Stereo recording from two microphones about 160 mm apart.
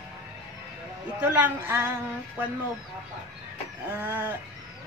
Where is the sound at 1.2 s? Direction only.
10° right (ahead or behind).